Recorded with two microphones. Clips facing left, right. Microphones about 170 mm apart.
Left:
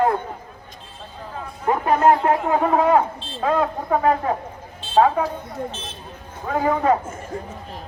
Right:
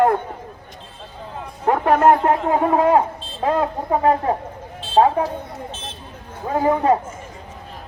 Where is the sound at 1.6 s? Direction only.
70° right (ahead or behind).